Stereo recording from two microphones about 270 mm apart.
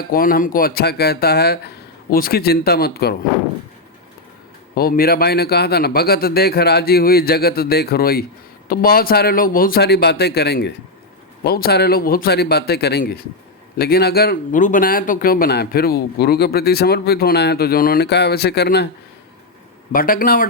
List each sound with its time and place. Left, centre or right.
0.0 s speech: left
4.7 s speech: left
19.9 s speech: left